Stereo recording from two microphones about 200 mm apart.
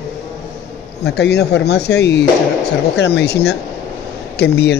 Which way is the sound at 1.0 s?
55° left (ahead or behind).